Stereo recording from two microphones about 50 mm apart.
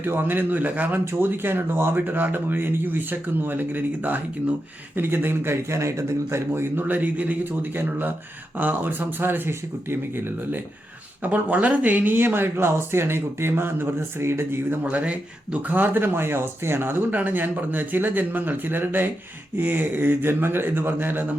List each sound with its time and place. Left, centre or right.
0.0 s speech: right
6.5 s speech: right
11.2 s speech: right
14.8 s speech: right
17.2 s speech: right